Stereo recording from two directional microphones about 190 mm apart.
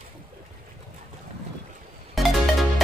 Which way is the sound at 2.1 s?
Centre (ahead or behind).